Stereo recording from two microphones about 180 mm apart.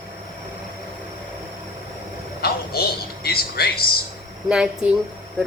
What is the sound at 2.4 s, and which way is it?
Speech, 60° left (ahead or behind).